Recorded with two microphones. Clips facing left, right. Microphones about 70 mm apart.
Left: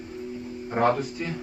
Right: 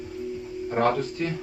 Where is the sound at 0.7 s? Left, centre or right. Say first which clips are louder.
Even; centre.